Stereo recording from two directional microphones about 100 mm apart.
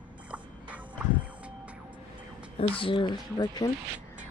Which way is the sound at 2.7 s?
65° left (ahead or behind).